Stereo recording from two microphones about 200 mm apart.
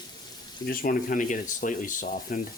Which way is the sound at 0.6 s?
45° left (ahead or behind).